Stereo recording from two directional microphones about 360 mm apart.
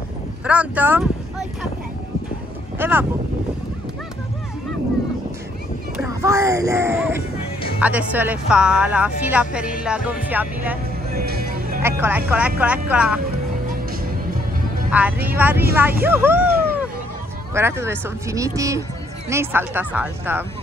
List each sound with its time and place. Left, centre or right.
0.5 s speech: centre
2.8 s speech: centre
5.9 s speech: centre
11.1 s music: right
12.3 s speech: centre
14.9 s speech: centre
17.6 s speech: centre